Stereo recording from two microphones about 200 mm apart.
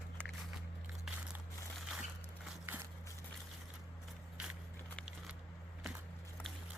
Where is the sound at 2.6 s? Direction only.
10° right (ahead or behind).